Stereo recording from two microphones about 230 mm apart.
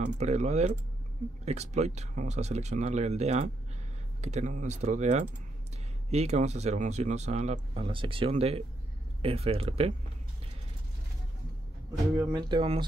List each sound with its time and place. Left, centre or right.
0.0 s speech: right
12.2 s speech: centre